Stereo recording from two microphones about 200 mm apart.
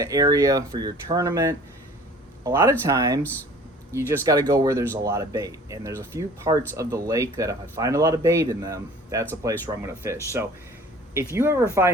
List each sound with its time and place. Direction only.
0.0 s speech: 20° right (ahead or behind)
4.3 s speech: 15° right (ahead or behind)